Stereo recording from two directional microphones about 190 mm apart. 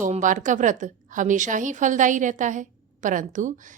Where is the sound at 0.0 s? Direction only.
45° right (ahead or behind).